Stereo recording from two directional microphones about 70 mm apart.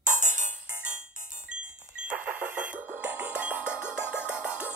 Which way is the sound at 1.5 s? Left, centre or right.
Centre.